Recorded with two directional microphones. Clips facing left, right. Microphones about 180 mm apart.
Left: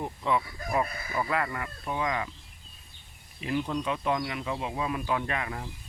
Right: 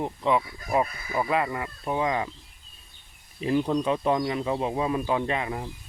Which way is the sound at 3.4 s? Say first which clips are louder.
Right 6 dB; 35° right (ahead or behind).